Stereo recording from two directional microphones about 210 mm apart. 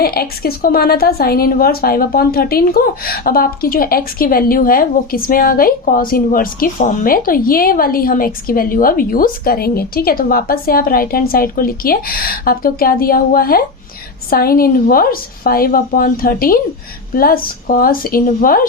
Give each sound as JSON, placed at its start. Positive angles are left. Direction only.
{"t": 0.0, "sound": "a woman's voice", "side_deg": 45}